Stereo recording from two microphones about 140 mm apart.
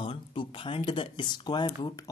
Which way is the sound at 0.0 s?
35° left (ahead or behind).